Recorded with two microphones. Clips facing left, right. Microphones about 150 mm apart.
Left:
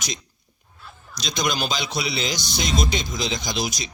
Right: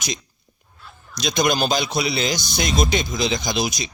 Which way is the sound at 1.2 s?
55° right (ahead or behind).